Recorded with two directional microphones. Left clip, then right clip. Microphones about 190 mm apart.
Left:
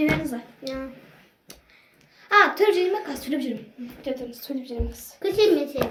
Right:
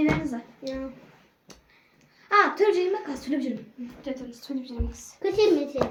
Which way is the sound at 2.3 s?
15° right (ahead or behind).